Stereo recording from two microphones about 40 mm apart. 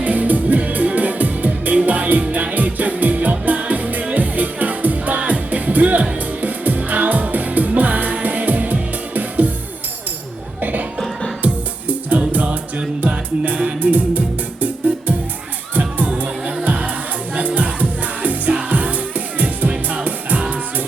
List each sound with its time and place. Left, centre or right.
0.0 s music: right
10.6 s music: right
15.7 s crowd: right
16.6 s music: right